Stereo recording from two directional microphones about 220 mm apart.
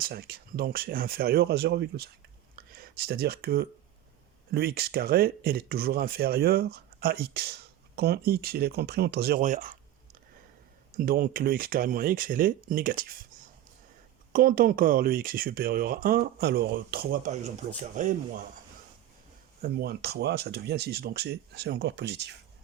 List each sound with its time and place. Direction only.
0.0 s speech: 45° right (ahead or behind)
10.9 s speech: 40° right (ahead or behind)
14.3 s speech: 40° right (ahead or behind)
19.6 s speech: 45° right (ahead or behind)